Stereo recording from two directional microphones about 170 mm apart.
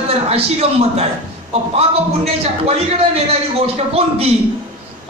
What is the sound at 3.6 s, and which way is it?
Speech, 35° right (ahead or behind).